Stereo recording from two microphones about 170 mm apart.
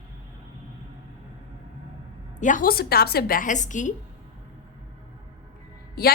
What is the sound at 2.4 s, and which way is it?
A woman's voice, 50° left (ahead or behind).